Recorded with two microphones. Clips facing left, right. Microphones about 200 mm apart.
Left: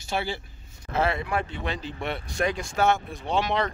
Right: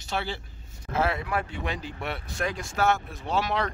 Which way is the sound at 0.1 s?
10° left (ahead or behind).